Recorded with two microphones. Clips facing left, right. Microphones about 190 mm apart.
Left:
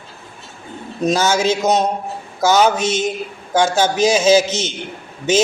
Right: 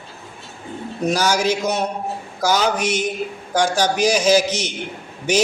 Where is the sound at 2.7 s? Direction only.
25° left (ahead or behind).